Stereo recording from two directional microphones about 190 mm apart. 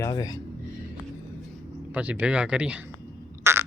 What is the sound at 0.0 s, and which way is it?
Speech, 20° left (ahead or behind).